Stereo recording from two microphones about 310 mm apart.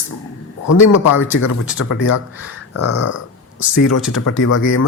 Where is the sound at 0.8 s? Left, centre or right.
Left.